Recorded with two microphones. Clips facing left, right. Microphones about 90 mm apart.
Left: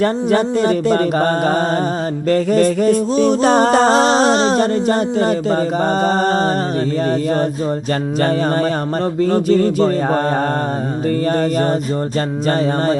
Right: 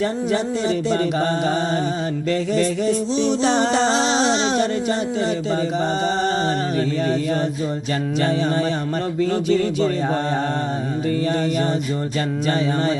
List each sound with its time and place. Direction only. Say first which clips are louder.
0.0 s music: left 6 dB; 55° left (ahead or behind)
9.2 s music: left 5 dB; 45° left (ahead or behind)